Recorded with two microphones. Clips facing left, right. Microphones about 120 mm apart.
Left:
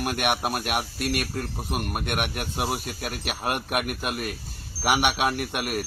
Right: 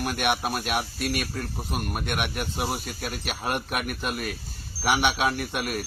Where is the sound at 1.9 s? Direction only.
50° left (ahead or behind).